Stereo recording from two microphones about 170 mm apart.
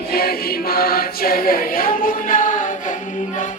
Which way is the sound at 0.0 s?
65° left (ahead or behind).